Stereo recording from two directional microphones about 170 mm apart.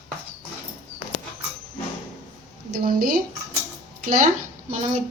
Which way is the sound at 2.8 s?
60° right (ahead or behind).